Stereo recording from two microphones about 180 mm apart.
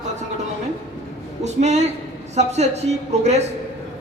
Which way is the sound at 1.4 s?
40° right (ahead or behind).